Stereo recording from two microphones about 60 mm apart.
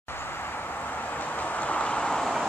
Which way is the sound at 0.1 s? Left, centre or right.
Left.